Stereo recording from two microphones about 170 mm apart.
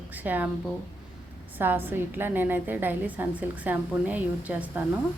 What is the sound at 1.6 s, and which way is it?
A woman's voice, 10° right (ahead or behind).